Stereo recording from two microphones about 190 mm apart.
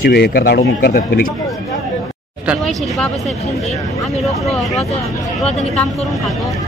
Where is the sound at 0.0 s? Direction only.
55° left (ahead or behind).